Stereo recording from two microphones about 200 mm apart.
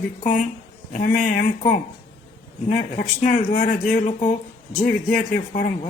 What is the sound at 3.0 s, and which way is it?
Speech, 45° left (ahead or behind).